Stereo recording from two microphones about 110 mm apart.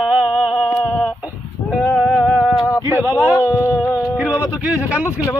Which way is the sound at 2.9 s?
20° right (ahead or behind).